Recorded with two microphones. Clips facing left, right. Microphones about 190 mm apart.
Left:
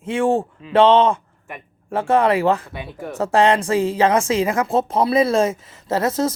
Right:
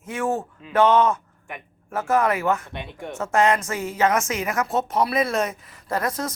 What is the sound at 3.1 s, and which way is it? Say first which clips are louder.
A woman's voice: left 4 dB; 35° left (ahead or behind).